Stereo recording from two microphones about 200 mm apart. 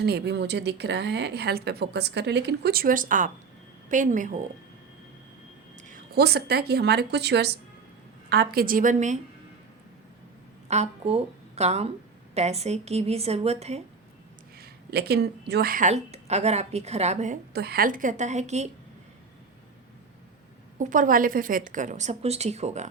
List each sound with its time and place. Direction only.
0.0 s speech: 55° right (ahead or behind); by 4.4 s 40° right (ahead or behind)
5.9 s speech: 55° right (ahead or behind)
10.7 s a woman's voice: 30° right (ahead or behind)
14.6 s speech: 50° right (ahead or behind); by 17.3 s 35° right (ahead or behind)
17.5 s speech: 50° right (ahead or behind); by 18.7 s 35° right (ahead or behind)
20.7 s speech: 40° right (ahead or behind)